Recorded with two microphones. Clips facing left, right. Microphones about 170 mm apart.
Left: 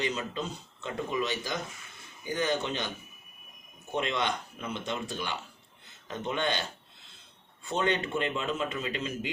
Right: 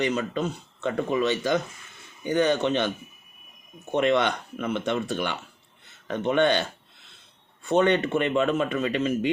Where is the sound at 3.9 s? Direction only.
65° right (ahead or behind).